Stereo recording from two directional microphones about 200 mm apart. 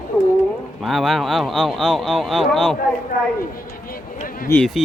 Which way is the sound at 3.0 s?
45° left (ahead or behind).